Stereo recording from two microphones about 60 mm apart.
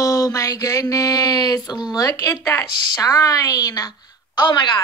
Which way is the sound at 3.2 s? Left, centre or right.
Left.